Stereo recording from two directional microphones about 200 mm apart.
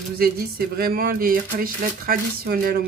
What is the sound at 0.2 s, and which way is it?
Speech, 50° right (ahead or behind).